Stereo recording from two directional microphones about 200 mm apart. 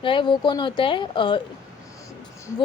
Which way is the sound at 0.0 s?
25° left (ahead or behind).